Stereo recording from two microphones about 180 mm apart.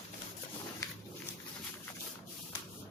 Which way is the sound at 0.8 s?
20° left (ahead or behind).